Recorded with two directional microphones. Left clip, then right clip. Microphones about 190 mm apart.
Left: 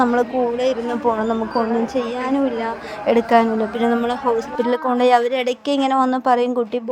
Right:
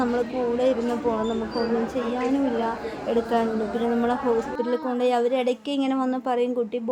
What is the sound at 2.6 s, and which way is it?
A woman's voice, 20° left (ahead or behind).